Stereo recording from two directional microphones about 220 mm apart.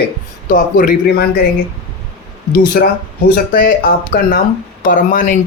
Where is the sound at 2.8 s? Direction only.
40° left (ahead or behind).